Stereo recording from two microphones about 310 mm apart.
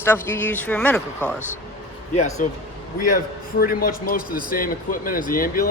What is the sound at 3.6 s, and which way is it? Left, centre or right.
Speech, left.